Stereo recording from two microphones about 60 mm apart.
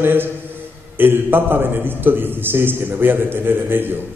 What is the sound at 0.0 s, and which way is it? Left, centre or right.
A man's voice, right.